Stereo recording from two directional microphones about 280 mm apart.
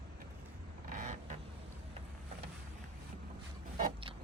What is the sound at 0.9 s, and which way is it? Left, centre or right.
Creak, right.